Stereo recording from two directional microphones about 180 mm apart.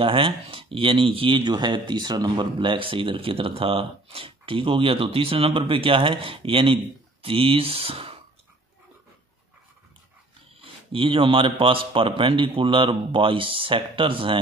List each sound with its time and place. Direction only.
0.0 s speech: 30° right (ahead or behind)
10.6 s a man's voice: 30° right (ahead or behind)